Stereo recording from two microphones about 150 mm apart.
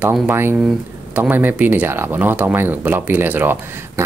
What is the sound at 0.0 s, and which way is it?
Speech, 15° right (ahead or behind).